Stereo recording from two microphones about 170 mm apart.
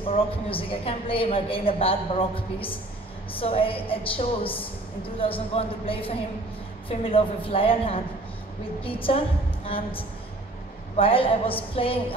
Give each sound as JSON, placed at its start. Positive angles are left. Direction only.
{"t": 0.0, "sound": "a woman's voice", "side_deg": 35}